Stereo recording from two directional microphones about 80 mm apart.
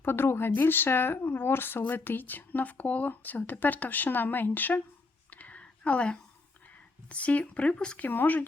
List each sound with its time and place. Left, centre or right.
0.0 s speech: left
5.3 s whispering: centre
7.1 s speech: centre